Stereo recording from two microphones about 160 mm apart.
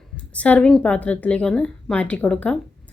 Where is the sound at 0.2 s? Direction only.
10° left (ahead or behind).